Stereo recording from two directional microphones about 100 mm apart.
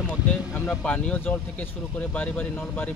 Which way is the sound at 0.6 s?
15° left (ahead or behind).